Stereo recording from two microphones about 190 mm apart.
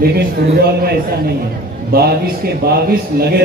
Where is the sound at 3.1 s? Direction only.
50° right (ahead or behind).